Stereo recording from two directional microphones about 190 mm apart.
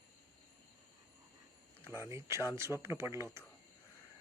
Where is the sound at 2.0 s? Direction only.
15° right (ahead or behind).